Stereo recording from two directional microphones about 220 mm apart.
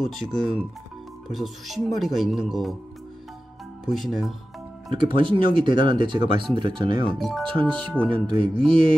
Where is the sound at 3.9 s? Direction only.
Centre (ahead or behind).